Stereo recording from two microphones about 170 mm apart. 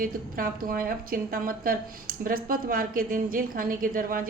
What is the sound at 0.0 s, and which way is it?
A woman's voice, 55° right (ahead or behind).